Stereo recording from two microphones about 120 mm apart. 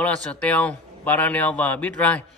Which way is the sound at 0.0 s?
10° left (ahead or behind).